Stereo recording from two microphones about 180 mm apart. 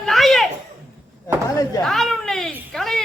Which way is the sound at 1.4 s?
20° left (ahead or behind).